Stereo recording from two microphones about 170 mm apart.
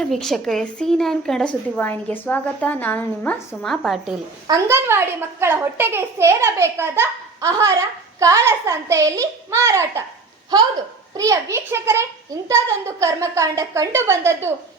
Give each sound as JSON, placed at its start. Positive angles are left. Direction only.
{"t": 0.0, "sound": "a woman's voice", "side_deg": 0}
{"t": 4.4, "sound": "a child's voice", "side_deg": -20}
{"t": 11.1, "sound": "a child's voice", "side_deg": -20}